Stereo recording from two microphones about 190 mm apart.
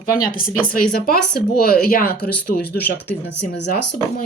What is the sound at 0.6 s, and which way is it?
Speech, 50° left (ahead or behind).